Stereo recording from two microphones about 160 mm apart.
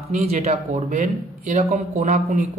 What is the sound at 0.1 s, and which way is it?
Speech, 40° right (ahead or behind).